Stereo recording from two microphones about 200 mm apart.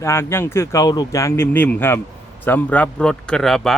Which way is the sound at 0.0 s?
15° left (ahead or behind).